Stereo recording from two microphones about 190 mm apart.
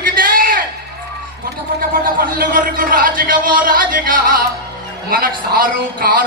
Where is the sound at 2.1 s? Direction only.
50° right (ahead or behind).